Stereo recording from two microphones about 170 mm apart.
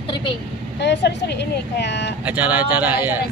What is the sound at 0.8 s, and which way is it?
A woman's voice, 85° left.